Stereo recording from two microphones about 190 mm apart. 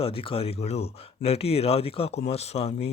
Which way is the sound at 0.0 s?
30° left (ahead or behind).